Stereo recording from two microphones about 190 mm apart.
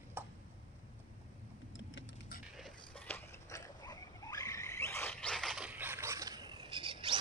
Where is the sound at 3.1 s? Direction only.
15° left (ahead or behind).